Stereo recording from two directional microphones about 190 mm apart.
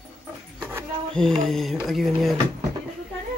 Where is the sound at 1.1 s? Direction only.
Centre (ahead or behind).